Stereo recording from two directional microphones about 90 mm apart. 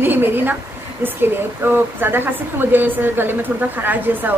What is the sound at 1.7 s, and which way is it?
A woman's voice, 25° right (ahead or behind).